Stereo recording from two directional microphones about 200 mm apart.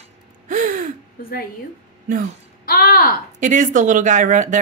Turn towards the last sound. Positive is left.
turn(degrees=-40)  # may be behind; listen again after turning